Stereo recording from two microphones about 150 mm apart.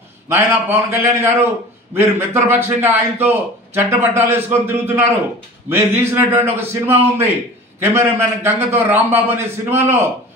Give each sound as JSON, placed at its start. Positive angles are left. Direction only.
{"t": 0.3, "sound": "a man's voice", "side_deg": -15}